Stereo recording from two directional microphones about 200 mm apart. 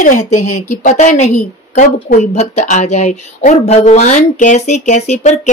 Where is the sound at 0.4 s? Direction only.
90° left.